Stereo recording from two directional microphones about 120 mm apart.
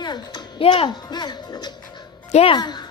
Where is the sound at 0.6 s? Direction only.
45° left (ahead or behind).